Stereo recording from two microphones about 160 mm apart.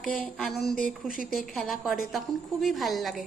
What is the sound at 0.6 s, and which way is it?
Speech, 60° left (ahead or behind).